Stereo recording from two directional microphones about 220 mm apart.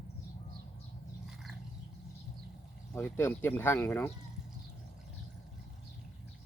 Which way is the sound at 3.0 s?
10° left (ahead or behind).